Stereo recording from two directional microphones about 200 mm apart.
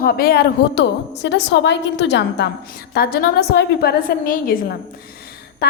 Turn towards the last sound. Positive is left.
turn(degrees=45)  # may be behind; listen again after turning